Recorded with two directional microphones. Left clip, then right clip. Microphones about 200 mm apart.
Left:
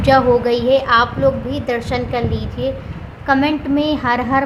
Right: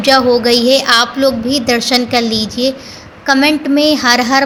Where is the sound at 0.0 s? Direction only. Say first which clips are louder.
Right 3 dB; 15° right (ahead or behind).